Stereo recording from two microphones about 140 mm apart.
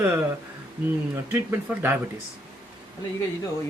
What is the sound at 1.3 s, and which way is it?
Speech, 20° right (ahead or behind).